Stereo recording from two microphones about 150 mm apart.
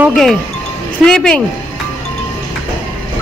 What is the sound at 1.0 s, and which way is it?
Speech, 5° left (ahead or behind).